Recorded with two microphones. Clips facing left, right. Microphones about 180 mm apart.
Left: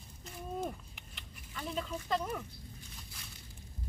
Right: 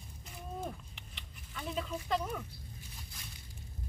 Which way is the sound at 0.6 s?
10° left (ahead or behind).